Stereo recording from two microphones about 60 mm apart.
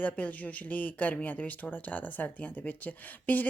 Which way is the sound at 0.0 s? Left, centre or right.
Left.